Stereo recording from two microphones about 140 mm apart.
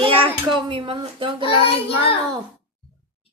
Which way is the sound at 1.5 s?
40° left (ahead or behind).